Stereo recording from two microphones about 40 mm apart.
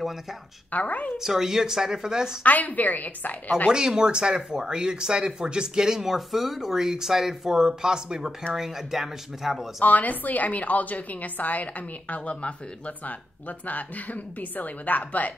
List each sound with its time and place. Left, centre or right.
0.0 s a woman's voice: centre
0.7 s speech: left
1.1 s speech: centre
2.4 s a woman's voice: left
3.7 s speech: centre
9.8 s a woman's voice: left